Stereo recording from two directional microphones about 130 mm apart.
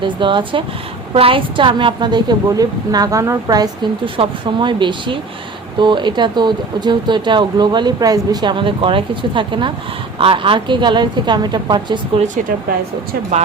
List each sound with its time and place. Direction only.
0.0 s speech: 40° right (ahead or behind)
4.0 s speech: 40° right (ahead or behind)